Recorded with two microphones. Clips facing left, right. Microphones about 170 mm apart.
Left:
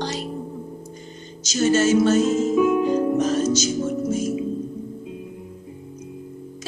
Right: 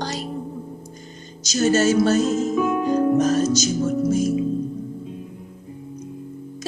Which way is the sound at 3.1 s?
40° right (ahead or behind).